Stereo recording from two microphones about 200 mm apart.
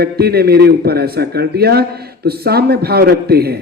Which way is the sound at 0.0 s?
50° right (ahead or behind).